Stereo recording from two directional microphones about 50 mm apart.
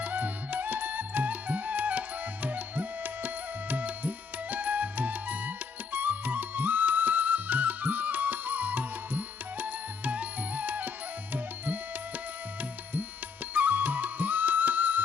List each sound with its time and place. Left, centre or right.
0.0 s music: right
13.5 s music: right